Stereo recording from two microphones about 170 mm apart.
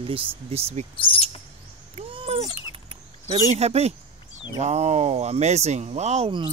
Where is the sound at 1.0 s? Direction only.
30° left (ahead or behind).